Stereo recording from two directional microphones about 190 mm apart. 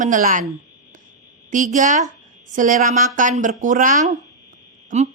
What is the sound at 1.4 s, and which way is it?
A woman's voice, 40° right (ahead or behind).